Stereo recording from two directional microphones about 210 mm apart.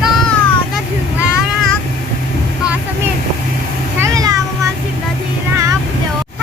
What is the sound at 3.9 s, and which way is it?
Meow, 15° right (ahead or behind).